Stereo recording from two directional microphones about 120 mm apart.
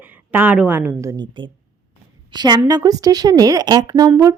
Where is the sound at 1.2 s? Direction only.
40° right (ahead or behind).